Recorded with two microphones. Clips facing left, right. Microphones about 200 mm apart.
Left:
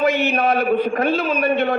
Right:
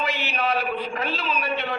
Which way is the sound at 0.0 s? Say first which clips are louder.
Left 9 dB; 50° left (ahead or behind).